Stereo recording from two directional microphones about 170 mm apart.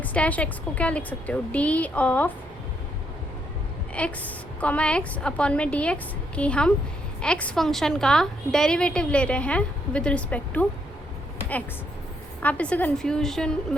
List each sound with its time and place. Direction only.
0.0 s a woman's voice: 10° left (ahead or behind)
4.0 s a woman's voice: 5° left (ahead or behind)
12.4 s a woman's voice: 10° left (ahead or behind)